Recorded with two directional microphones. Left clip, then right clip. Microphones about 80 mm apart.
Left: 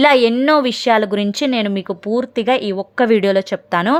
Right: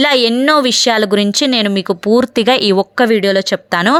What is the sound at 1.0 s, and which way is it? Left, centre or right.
Speech, right.